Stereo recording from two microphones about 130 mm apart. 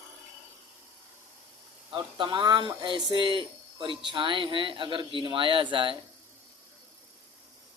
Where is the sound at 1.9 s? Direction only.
40° right (ahead or behind).